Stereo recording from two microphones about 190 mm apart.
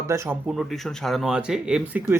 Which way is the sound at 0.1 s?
15° right (ahead or behind).